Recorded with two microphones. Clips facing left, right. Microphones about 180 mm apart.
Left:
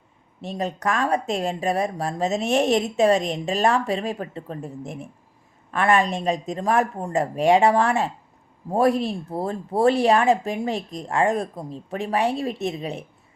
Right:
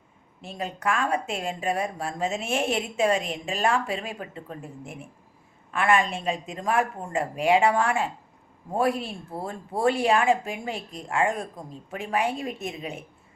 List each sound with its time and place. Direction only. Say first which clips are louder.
0.4 s speech: left 4 dB; 40° left (ahead or behind)